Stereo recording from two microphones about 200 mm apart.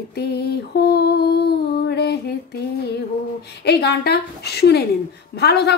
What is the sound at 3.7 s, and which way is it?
Speech, 55° left (ahead or behind).